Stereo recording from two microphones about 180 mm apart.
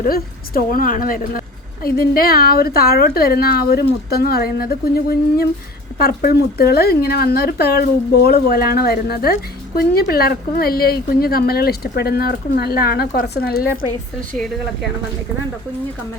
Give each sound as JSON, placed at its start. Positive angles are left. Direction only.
{"t": 0.0, "sound": "a woman's voice", "side_deg": 55}
{"t": 14.3, "sound": "speech", "side_deg": 0}